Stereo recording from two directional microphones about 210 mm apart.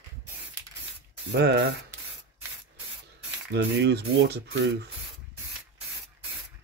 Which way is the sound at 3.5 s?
50° right (ahead or behind).